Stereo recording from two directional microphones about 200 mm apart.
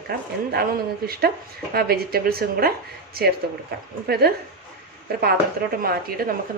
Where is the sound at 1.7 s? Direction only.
50° right (ahead or behind).